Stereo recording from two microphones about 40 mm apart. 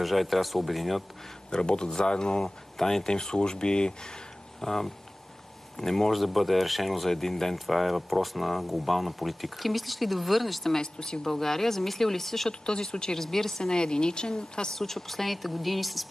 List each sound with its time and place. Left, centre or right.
0.0 s speech: centre
1.5 s speech: left
4.6 s speech: centre
10.8 s speech: centre
12.4 s speech: centre
14.8 s speech: centre